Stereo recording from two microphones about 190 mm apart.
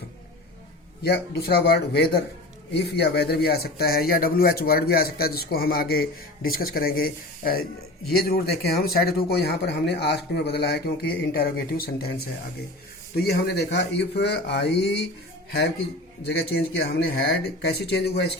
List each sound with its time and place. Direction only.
1.0 s speech: 55° left (ahead or behind)
8.8 s speech: 55° left (ahead or behind)
16.2 s speech: 60° left (ahead or behind)